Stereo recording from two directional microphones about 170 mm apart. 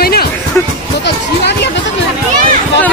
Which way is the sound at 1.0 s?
85° left.